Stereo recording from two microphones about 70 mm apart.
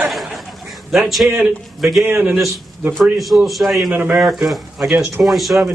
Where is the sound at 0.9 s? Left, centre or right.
Centre.